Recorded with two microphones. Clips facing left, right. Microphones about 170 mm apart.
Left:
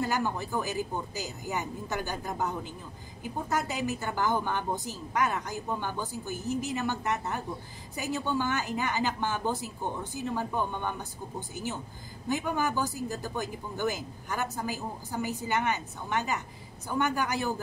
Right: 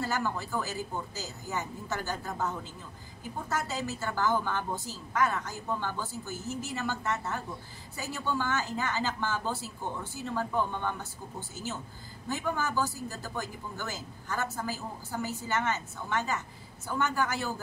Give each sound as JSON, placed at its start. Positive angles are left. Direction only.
{"t": 0.0, "sound": "speech", "side_deg": 15}